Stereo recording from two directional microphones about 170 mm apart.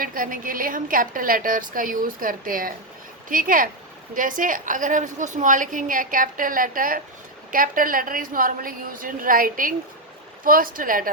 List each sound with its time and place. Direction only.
0.0 s a woman's voice: 55° right (ahead or behind)